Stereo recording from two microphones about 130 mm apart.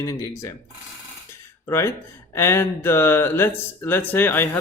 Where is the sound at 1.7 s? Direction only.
20° left (ahead or behind).